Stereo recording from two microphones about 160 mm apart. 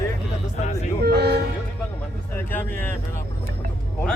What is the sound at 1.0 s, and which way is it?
Vehicle, 90° right.